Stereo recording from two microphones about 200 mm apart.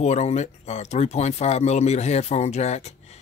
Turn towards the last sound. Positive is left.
turn(degrees=35)  # may be behind; listen again after turning